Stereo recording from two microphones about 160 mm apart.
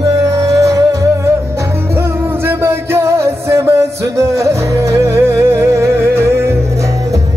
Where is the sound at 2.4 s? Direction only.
15° right (ahead or behind).